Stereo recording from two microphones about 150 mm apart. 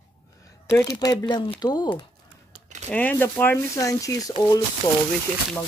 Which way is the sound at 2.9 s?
10° left (ahead or behind).